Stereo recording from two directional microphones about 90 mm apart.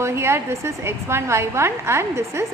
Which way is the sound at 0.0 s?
30° right (ahead or behind).